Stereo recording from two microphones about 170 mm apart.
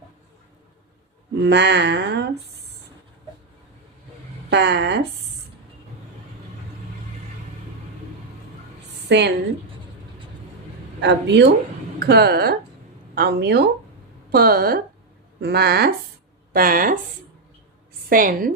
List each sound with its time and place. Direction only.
1.4 s speech: 85° right
4.4 s speech: 80° right
9.0 s a woman's voice: 90° right
11.0 s speech: 90° right
11.9 s speech: 70° right (ahead or behind)
14.3 s speech: 65° right (ahead or behind)
15.4 s speech: 70° right (ahead or behind)
16.5 s speech: 55° right (ahead or behind)
18.1 s a woman's voice: 55° right (ahead or behind)